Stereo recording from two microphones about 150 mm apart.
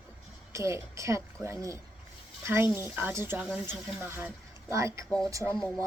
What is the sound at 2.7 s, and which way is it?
Speech, 15° right (ahead or behind).